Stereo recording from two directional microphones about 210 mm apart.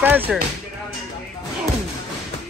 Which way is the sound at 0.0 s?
10° right (ahead or behind).